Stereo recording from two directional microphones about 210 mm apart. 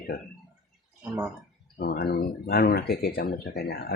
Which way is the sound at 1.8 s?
45° left (ahead or behind).